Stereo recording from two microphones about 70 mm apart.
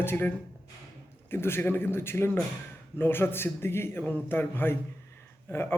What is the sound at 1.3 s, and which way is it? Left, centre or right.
Speech, left.